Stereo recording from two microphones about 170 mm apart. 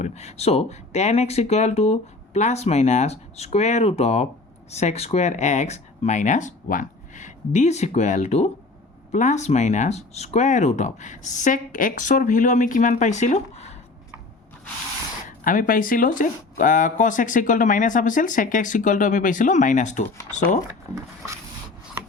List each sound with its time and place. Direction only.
0.0 s speech: 40° left (ahead or behind)
15.4 s speech: 55° left (ahead or behind)